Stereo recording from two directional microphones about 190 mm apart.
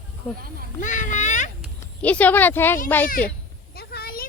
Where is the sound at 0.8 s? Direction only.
40° left (ahead or behind).